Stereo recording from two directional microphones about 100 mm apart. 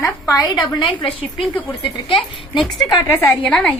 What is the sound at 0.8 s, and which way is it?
Speech, 55° left (ahead or behind).